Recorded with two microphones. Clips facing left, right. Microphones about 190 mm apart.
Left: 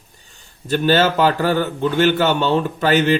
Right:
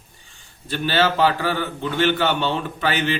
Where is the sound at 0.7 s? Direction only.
45° left (ahead or behind).